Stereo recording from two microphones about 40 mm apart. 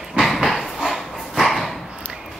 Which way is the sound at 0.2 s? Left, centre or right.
Centre.